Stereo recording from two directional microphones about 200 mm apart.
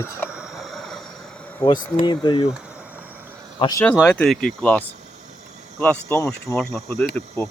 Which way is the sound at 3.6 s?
20° left (ahead or behind).